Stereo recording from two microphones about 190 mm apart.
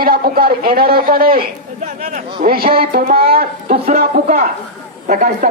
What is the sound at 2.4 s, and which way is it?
A man's voice, 50° right (ahead or behind).